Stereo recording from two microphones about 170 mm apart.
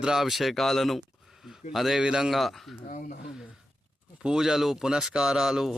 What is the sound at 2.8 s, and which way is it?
Speech, 50° left (ahead or behind).